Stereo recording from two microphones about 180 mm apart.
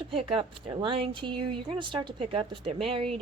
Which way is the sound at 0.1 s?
30° right (ahead or behind).